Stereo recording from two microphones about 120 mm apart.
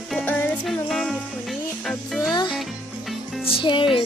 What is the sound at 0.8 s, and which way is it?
Music, 5° left (ahead or behind).